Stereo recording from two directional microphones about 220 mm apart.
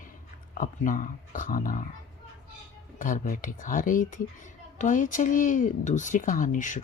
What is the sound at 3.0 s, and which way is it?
Speech, 40° left (ahead or behind).